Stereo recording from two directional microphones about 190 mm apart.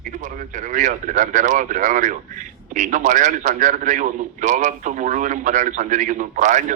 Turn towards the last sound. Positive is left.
turn(degrees=-40)  # may be behind; listen again after turning